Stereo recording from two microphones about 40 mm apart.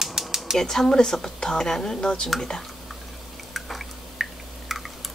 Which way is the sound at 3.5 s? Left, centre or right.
Centre.